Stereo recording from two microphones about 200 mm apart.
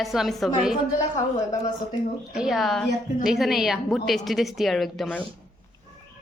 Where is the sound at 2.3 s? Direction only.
Centre (ahead or behind).